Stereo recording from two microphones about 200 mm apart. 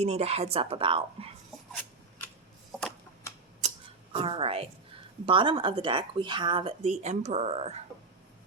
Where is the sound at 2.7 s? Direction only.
Centre (ahead or behind).